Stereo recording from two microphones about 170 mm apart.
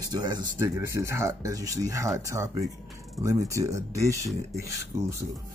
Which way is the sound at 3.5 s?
20° right (ahead or behind).